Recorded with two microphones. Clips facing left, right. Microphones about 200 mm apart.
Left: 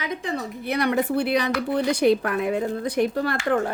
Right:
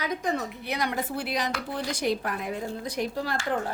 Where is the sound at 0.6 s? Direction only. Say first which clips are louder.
Left 7 dB; 60° left (ahead or behind).